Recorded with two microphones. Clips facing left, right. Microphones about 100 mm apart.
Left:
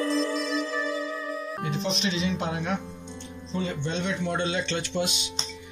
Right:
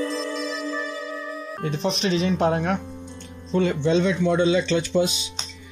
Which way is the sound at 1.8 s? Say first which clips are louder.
Right 7 dB; 45° right (ahead or behind).